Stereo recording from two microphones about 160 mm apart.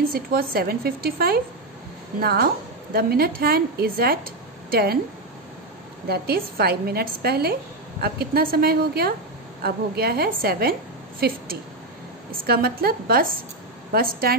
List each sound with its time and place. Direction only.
0.1 s a woman's voice: 70° right (ahead or behind)
6.0 s a woman's voice: 80° right